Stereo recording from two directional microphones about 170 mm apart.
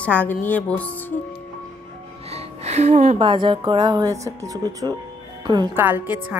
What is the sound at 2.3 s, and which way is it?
Music, 40° right (ahead or behind).